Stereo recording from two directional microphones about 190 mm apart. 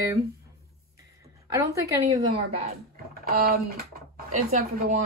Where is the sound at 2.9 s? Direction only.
50° right (ahead or behind).